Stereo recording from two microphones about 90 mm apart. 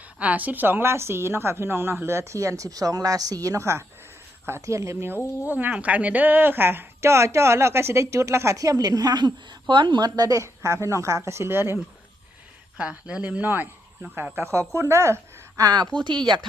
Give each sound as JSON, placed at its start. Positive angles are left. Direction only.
{"t": 0.2, "sound": "a woman's voice", "side_deg": -15}
{"t": 12.7, "sound": "speech", "side_deg": -10}